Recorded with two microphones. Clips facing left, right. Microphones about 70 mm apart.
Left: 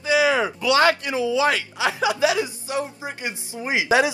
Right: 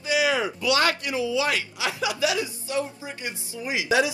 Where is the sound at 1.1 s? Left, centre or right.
Left.